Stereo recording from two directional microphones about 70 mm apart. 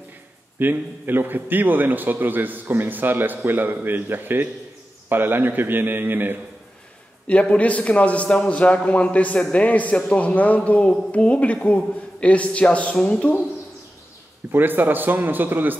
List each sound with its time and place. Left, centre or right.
0.6 s a man's voice: right
7.2 s a man's voice: centre
14.5 s a man's voice: right